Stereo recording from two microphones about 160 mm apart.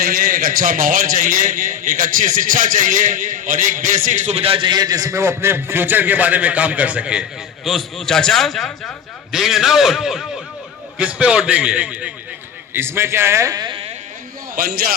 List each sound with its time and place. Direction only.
0.0 s a man's voice: 60° right (ahead or behind); by 13.9 s 30° right (ahead or behind)
14.5 s a man's voice: 65° right (ahead or behind)